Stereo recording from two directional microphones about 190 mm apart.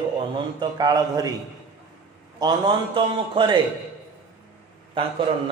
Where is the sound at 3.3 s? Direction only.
25° right (ahead or behind).